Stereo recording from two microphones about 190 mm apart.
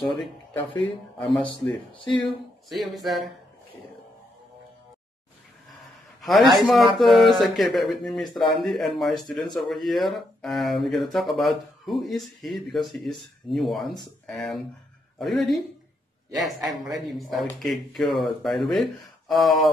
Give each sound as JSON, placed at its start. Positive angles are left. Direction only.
{"t": 0.0, "sound": "speech", "side_deg": 0}
{"t": 2.0, "sound": "speech", "side_deg": 25}
{"t": 2.2, "sound": "speech", "side_deg": 0}
{"t": 6.2, "sound": "a man's voice", "side_deg": 0}